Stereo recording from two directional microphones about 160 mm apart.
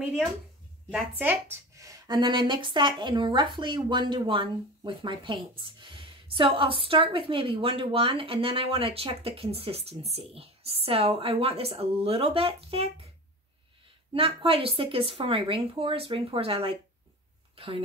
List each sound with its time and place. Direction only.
0.9 s speech: 10° right (ahead or behind); by 13.1 s 35° right (ahead or behind)
14.1 s speech: 35° right (ahead or behind)